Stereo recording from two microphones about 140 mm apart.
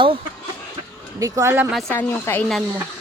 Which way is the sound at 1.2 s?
20° right (ahead or behind).